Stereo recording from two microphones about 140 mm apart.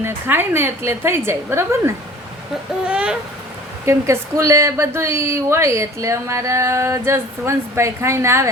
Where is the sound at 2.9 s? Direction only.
5° right (ahead or behind).